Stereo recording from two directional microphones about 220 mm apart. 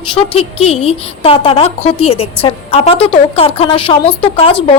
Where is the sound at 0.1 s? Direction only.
25° left (ahead or behind).